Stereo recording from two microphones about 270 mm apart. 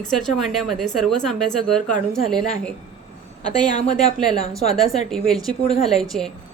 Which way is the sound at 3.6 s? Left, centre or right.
Left.